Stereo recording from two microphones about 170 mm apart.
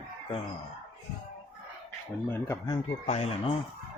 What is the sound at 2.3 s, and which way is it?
Speech, 15° left (ahead or behind).